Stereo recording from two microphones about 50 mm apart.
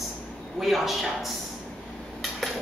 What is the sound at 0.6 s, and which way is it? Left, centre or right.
Speech, centre.